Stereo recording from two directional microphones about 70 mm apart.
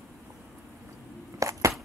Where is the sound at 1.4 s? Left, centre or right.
Right.